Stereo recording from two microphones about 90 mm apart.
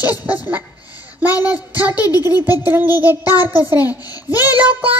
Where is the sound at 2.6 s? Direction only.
20° right (ahead or behind).